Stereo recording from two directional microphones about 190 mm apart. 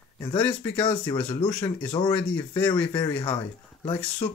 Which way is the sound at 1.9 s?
25° left (ahead or behind).